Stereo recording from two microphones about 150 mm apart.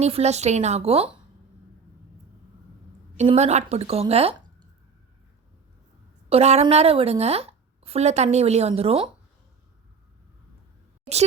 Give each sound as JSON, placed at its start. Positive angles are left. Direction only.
{"t": 0.0, "sound": "a woman's voice", "side_deg": -45}
{"t": 3.2, "sound": "a woman's voice", "side_deg": -45}
{"t": 6.2, "sound": "a woman's voice", "side_deg": -45}